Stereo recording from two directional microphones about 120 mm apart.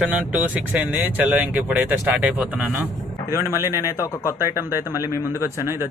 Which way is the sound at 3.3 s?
20° right (ahead or behind).